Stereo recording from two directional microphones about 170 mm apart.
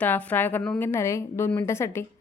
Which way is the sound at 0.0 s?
10° left (ahead or behind).